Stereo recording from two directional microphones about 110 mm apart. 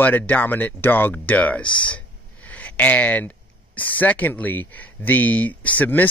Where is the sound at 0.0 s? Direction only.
15° left (ahead or behind).